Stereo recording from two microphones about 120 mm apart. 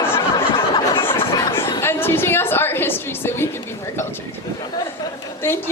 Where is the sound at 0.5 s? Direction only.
50° left (ahead or behind).